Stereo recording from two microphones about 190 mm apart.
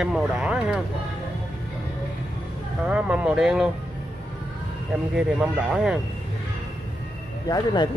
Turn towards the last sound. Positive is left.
turn(degrees=20)  # may be behind; listen again after turning